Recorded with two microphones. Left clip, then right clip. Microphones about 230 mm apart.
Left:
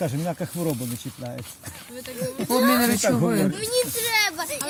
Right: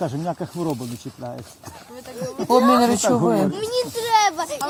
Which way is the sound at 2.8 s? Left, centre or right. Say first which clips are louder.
Right 4 dB; centre.